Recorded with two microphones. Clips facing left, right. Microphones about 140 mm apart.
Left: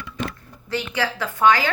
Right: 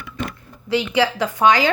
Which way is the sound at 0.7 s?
10° right (ahead or behind).